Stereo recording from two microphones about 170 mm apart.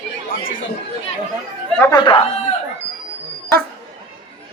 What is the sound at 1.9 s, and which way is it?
Speech, 30° left (ahead or behind).